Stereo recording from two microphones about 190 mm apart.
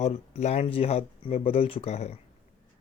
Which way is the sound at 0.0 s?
35° left (ahead or behind).